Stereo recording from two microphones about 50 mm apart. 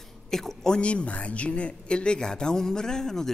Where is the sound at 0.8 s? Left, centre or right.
Left.